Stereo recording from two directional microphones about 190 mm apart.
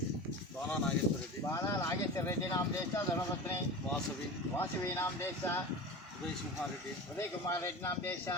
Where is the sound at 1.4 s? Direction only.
15° left (ahead or behind).